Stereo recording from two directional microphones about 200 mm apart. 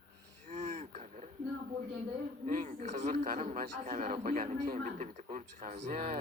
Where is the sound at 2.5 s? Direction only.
40° right (ahead or behind).